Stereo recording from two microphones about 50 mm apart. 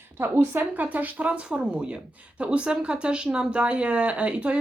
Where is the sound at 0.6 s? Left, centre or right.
Right.